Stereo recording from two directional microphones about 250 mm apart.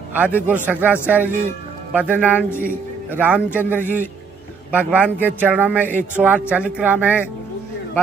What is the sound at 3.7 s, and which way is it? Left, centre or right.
Speech, centre.